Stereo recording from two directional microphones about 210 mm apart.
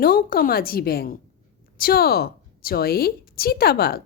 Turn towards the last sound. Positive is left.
turn(degrees=50)  # may be behind; listen again after turning